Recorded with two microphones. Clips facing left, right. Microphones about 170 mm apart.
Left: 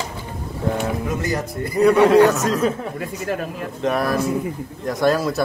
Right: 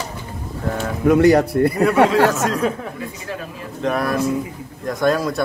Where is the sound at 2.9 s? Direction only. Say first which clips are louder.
Left 4 dB; 55° left (ahead or behind).